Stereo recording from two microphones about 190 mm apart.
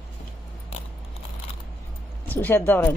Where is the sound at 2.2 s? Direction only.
10° left (ahead or behind).